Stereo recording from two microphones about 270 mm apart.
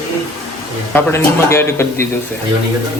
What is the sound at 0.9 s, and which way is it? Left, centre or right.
Speech, centre.